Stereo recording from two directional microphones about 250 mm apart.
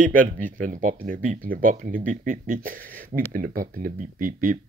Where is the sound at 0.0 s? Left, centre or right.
Right.